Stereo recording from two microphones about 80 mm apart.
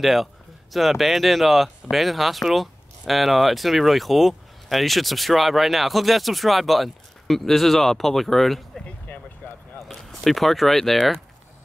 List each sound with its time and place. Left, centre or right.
0.0 s speech: centre
8.8 s a sound: centre
9.8 s speech: centre